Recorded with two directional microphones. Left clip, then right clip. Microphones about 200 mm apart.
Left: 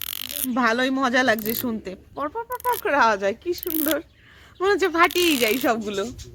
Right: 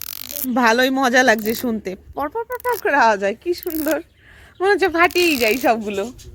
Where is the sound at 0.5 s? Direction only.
35° right (ahead or behind).